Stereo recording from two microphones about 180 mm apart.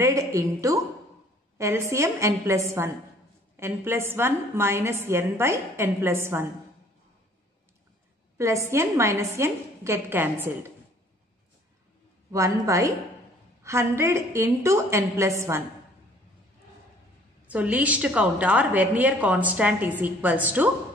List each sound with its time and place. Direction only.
0.0 s a woman's voice: 15° right (ahead or behind)
8.4 s a woman's voice: 15° right (ahead or behind)
12.3 s a woman's voice: 15° right (ahead or behind)
17.5 s a woman's voice: 10° right (ahead or behind)